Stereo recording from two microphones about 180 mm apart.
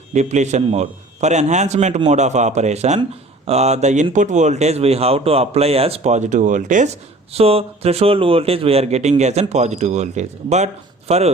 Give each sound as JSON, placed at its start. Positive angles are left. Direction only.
{"t": 0.1, "sound": "speech", "side_deg": -40}
{"t": 7.3, "sound": "speech", "side_deg": -35}